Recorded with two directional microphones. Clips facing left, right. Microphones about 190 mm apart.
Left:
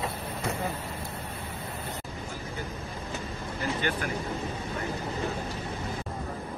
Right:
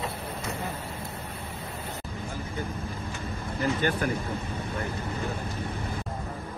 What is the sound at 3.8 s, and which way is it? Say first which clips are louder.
Speech: right 2 dB; 45° right (ahead or behind).